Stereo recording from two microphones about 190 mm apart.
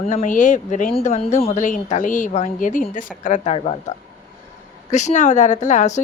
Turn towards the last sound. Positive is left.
turn(degrees=40)  # may be behind; listen again after turning